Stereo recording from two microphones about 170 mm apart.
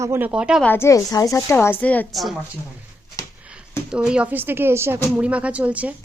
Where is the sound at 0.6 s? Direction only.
15° left (ahead or behind).